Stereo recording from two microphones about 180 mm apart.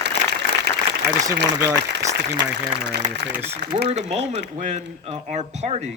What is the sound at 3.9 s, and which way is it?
Speech, 40° right (ahead or behind).